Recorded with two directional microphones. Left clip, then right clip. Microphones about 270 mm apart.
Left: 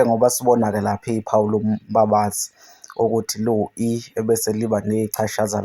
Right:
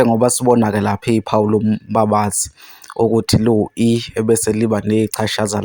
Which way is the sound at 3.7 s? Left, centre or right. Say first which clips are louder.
Right 6 dB; right.